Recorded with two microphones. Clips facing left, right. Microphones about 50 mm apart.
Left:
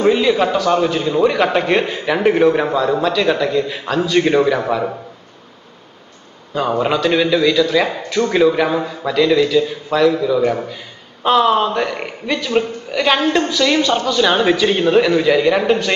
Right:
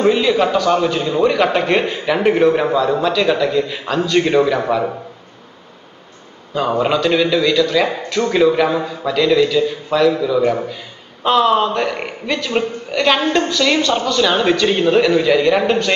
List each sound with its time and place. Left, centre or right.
0.0 s a man's voice: centre
6.8 s a man's voice: centre